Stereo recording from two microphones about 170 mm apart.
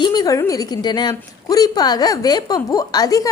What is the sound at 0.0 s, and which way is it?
A woman's voice, 25° left (ahead or behind).